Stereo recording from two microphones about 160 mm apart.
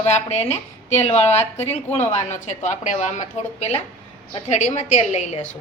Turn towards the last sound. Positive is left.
turn(degrees=45)  # may be behind; listen again after turning